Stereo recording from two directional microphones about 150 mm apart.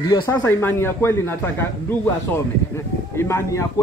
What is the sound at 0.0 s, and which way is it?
A man's voice, 25° left (ahead or behind).